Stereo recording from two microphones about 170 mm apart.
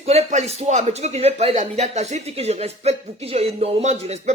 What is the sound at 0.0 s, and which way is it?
Speech, 40° right (ahead or behind).